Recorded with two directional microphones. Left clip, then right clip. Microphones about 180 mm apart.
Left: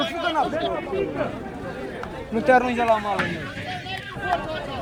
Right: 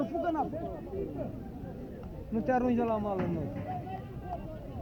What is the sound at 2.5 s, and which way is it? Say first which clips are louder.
Speech: left 12 dB; 10° right (ahead or behind).